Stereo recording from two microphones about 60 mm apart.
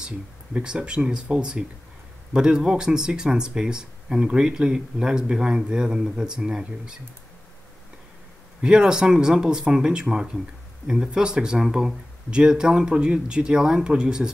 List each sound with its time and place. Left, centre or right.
0.0 s speech: centre
8.6 s speech: centre